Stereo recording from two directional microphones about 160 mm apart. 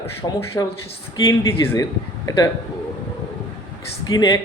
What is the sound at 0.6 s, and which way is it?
Speech, 20° left (ahead or behind).